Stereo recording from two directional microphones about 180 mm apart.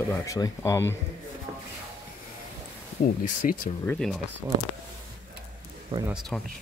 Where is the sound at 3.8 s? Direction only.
10° left (ahead or behind).